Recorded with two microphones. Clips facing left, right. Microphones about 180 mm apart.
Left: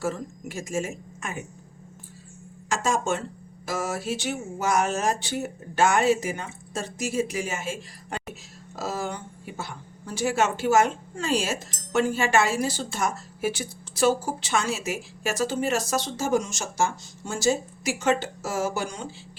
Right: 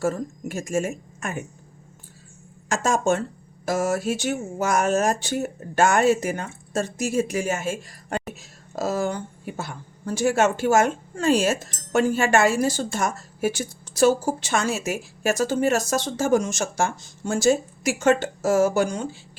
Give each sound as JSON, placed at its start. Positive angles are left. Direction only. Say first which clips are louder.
{"t": 0.0, "sound": "a woman's voice", "louder": "right 5 dB", "side_deg": -45}
{"t": 2.6, "sound": "a woman's voice", "louder": "right 4 dB", "side_deg": -45}